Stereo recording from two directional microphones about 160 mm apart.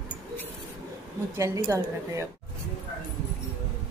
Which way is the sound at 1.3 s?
20° right (ahead or behind).